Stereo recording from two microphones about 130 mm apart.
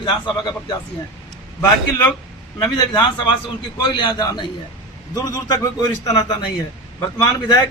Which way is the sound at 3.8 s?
35° left (ahead or behind).